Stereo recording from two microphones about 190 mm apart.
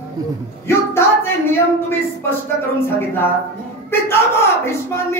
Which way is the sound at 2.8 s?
10° left (ahead or behind).